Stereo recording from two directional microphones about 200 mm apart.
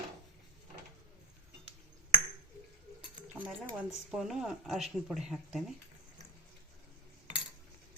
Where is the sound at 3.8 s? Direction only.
Centre (ahead or behind).